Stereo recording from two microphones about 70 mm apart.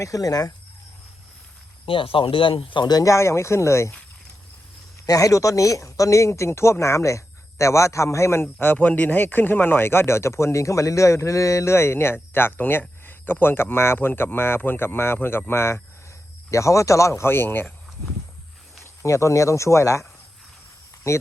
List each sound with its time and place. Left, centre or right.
0.0 s speech: left
3.0 s speech: left
5.0 s speech: left
8.6 s speech: left
18.8 s speech: left
21.1 s speech: left